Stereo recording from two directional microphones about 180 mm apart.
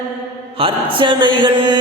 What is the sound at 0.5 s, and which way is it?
Mantra, 30° right (ahead or behind).